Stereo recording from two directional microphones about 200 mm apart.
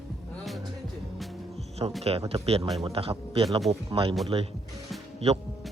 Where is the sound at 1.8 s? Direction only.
25° right (ahead or behind).